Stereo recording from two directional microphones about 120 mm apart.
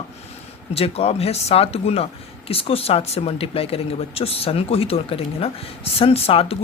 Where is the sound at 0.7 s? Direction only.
55° left (ahead or behind).